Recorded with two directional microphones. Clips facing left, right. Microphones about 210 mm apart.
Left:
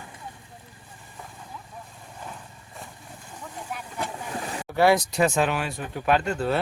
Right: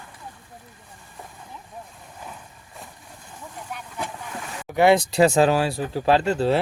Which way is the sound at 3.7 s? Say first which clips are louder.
Left 1 dB; centre (ahead or behind).